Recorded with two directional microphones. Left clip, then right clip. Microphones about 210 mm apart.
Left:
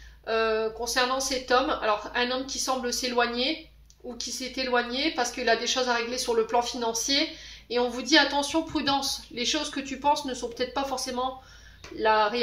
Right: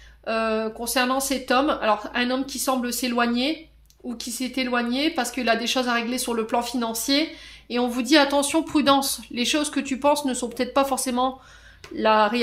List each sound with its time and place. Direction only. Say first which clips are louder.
0.2 s a woman's voice: right 1 dB; 50° right (ahead or behind)